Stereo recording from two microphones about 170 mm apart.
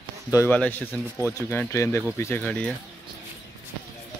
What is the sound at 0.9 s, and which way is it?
Speech, 15° right (ahead or behind).